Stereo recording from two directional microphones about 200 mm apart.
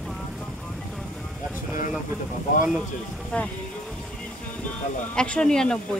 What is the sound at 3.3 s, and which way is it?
Speech, 5° left (ahead or behind).